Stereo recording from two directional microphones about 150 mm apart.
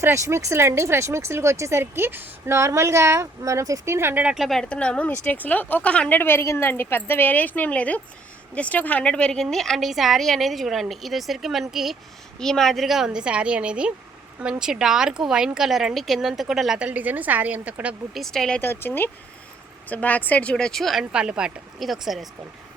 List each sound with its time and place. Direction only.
0.0 s a woman's voice: 20° right (ahead or behind); by 22.3 s centre (ahead or behind)